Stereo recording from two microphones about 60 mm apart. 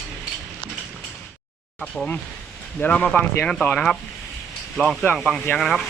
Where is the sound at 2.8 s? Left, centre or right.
Left.